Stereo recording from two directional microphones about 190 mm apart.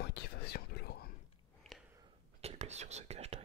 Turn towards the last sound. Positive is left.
turn(degrees=-35)  # may be behind; listen again after turning